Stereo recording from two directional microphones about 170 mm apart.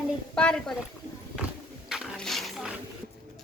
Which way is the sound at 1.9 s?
Centre (ahead or behind).